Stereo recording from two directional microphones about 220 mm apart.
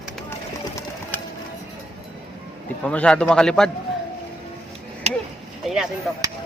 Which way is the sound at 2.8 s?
5° left (ahead or behind).